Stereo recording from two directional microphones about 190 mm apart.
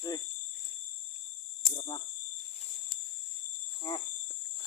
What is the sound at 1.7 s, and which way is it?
Cricket, 25° left (ahead or behind).